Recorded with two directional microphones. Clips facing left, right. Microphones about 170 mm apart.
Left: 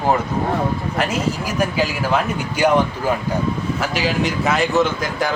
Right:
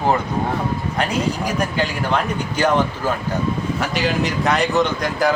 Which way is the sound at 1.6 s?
5° left (ahead or behind).